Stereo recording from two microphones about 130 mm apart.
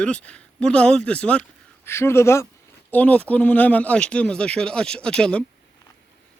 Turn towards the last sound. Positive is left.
turn(degrees=5)  # may be behind; listen again after turning